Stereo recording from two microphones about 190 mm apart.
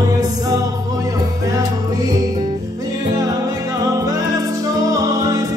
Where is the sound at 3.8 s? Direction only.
15° right (ahead or behind).